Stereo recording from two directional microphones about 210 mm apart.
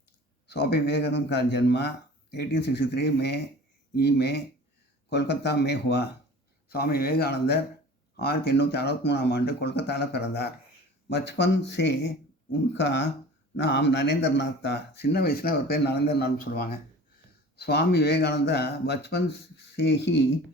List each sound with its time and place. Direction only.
0.4 s speech: 50° left (ahead or behind)